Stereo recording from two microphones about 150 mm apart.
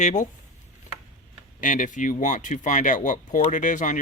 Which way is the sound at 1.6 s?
60° left (ahead or behind).